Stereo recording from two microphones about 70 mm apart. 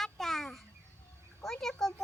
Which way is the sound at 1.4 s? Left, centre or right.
Centre.